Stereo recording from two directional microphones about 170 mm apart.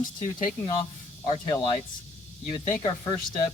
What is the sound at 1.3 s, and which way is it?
Speech, 35° left (ahead or behind).